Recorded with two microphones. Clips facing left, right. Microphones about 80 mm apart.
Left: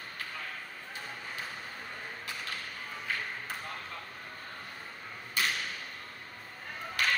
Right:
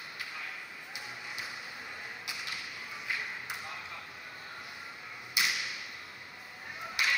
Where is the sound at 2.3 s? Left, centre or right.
Left.